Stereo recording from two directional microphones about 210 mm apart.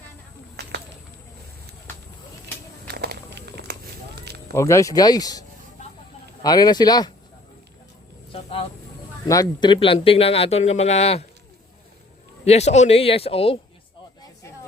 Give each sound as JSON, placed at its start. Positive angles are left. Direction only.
{"t": 0.5, "sound": "a sound", "side_deg": -50}
{"t": 2.8, "sound": "a sound", "side_deg": -50}
{"t": 4.5, "sound": "speech", "side_deg": 15}
{"t": 8.3, "sound": "vehicle", "side_deg": 25}
{"t": 9.2, "sound": "speech", "side_deg": 15}
{"t": 12.5, "sound": "speech", "side_deg": 30}